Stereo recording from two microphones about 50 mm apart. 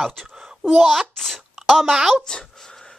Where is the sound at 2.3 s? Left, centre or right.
Centre.